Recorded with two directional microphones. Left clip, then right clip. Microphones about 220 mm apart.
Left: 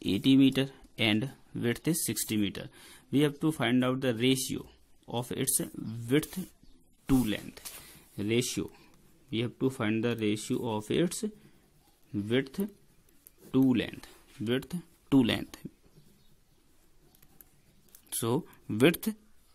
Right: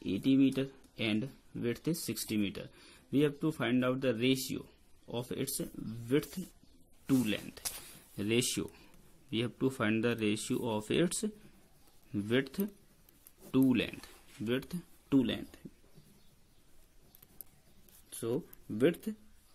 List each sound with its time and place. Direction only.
0.0 s speech: 30° left (ahead or behind)
7.2 s speech: 15° left (ahead or behind); by 15.6 s 40° left (ahead or behind)
18.2 s speech: 45° left (ahead or behind)